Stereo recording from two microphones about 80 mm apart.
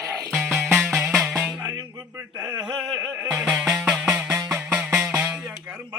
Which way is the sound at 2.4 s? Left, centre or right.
Right.